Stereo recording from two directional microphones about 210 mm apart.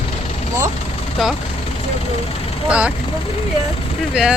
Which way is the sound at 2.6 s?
5° right (ahead or behind).